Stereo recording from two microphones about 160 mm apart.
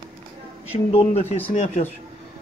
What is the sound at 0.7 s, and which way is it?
Speech, 40° left (ahead or behind).